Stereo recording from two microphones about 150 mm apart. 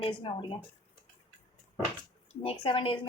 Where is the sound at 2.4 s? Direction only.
35° left (ahead or behind).